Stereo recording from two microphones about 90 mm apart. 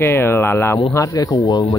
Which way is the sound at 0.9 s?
40° left (ahead or behind).